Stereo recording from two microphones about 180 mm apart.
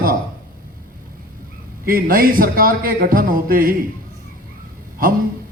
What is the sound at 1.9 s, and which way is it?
Speech, 55° right (ahead or behind).